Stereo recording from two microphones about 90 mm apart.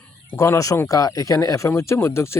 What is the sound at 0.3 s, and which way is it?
Speech, 35° left (ahead or behind).